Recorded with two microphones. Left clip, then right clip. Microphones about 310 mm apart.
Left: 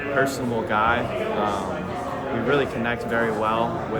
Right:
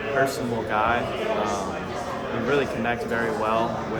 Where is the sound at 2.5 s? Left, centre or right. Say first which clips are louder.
Left 1 dB; centre.